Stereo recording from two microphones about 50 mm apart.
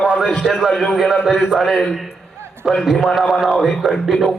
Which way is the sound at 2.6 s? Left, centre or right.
Centre.